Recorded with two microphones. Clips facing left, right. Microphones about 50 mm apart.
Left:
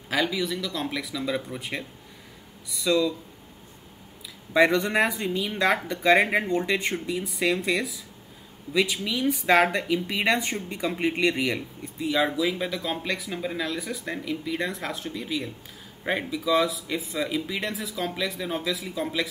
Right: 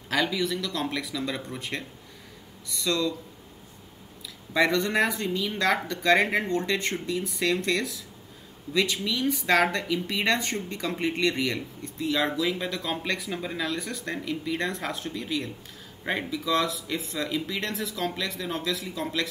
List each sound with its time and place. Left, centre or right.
0.1 s speech: centre
4.6 s speech: centre